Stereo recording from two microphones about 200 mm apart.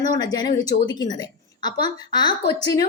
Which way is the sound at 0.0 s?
20° left (ahead or behind).